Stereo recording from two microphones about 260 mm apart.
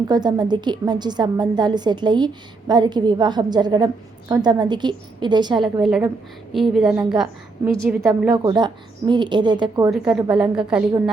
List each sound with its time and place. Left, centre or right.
0.1 s a woman's voice: centre
6.5 s a woman's voice: centre
9.9 s a woman's voice: centre